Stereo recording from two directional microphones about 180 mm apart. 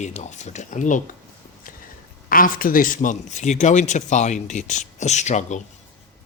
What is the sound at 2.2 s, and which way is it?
Speech, 50° left (ahead or behind).